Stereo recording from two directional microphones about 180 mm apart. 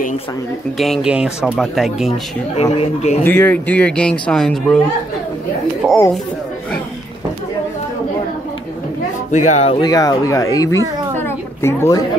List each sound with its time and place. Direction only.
0.7 s speech: centre (ahead or behind)
2.0 s speech: 35° left (ahead or behind)
3.3 s speech: 10° left (ahead or behind)
9.3 s speech: 40° left (ahead or behind)
9.8 s speech: 20° left (ahead or behind)
11.1 s a sound: 15° left (ahead or behind)